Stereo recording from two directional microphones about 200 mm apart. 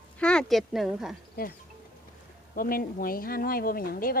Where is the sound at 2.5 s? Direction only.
45° left (ahead or behind).